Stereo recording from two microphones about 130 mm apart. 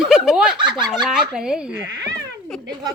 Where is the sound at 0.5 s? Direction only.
35° right (ahead or behind).